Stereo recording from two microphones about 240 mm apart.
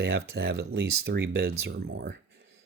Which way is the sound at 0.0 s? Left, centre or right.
Right.